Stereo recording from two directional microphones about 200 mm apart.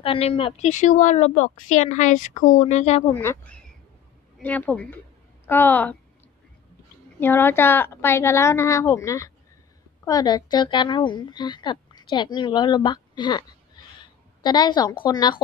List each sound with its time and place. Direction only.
0.0 s speech: 30° left (ahead or behind)
3.1 s a woman's voice: 10° left (ahead or behind)
7.2 s a woman's voice: 10° left (ahead or behind)